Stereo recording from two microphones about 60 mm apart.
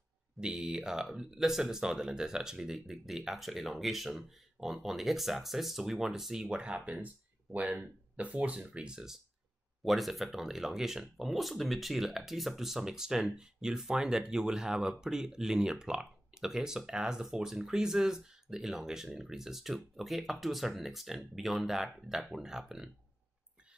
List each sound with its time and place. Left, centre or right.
0.4 s speech: centre
8.2 s speech: right; by 22.8 s centre